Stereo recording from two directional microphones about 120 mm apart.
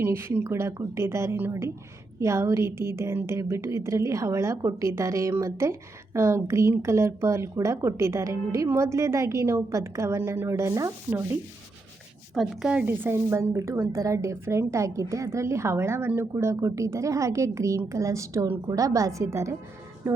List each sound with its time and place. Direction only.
0.0 s a woman's voice: 20° right (ahead or behind)
12.3 s a woman's voice: 5° right (ahead or behind); by 19.5 s 25° right (ahead or behind)